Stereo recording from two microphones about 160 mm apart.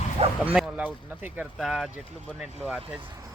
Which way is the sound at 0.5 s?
10° right (ahead or behind).